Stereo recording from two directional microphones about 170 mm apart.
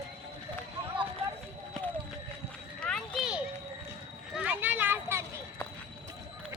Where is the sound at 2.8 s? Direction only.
Centre (ahead or behind).